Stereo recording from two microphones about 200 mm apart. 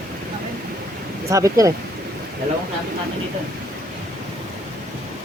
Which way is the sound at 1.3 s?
15° right (ahead or behind).